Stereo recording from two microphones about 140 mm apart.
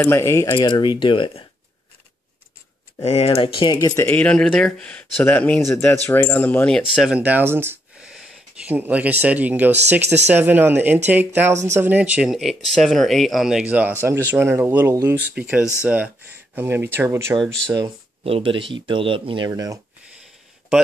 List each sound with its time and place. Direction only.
0.0 s speech: 20° left (ahead or behind)
0.6 s speech: 35° left (ahead or behind)
3.0 s speech: 45° left (ahead or behind)
3.9 s speech: 15° left (ahead or behind)
7.0 s speech: 10° right (ahead or behind)
8.1 s a sound: 5° right (ahead or behind)
9.2 s speech: 10° right (ahead or behind)
18.2 s speech: 40° right (ahead or behind)
19.5 s speech: 25° right (ahead or behind)